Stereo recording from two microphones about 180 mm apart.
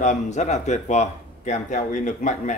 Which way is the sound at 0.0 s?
40° left (ahead or behind).